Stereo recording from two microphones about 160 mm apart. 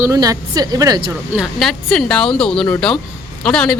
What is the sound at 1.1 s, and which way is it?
A woman's voice, 5° right (ahead or behind).